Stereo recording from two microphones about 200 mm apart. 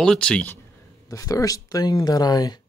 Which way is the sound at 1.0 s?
15° left (ahead or behind).